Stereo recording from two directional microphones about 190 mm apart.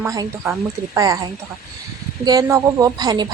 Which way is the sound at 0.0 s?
15° right (ahead or behind).